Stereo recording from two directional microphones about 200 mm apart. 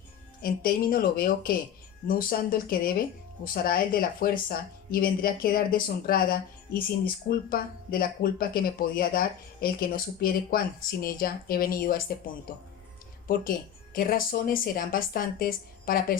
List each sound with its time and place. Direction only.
0.4 s speech: 45° left (ahead or behind)